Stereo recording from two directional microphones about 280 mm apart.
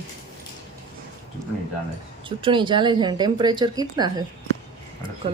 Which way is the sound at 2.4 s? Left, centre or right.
Centre.